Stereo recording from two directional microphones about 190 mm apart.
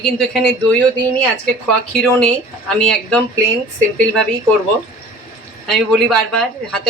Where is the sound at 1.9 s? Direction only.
5° left (ahead or behind).